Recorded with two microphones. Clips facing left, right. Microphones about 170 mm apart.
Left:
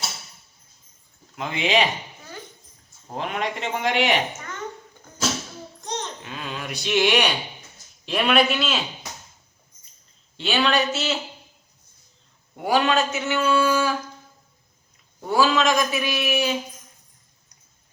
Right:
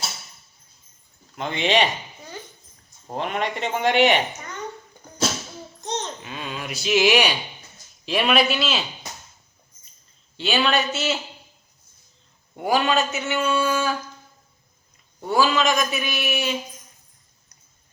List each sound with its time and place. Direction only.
1.4 s a man's voice: 5° left (ahead or behind)
3.2 s a man's voice: centre (ahead or behind)
5.8 s babbling: 20° right (ahead or behind)
6.2 s a man's voice: 5° right (ahead or behind)
10.3 s a man's voice: centre (ahead or behind)
12.6 s a man's voice: centre (ahead or behind)
15.3 s a man's voice: centre (ahead or behind)